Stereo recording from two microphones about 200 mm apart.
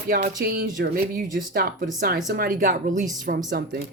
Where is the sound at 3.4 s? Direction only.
55° right (ahead or behind).